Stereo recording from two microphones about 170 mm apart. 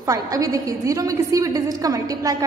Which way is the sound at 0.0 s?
20° right (ahead or behind).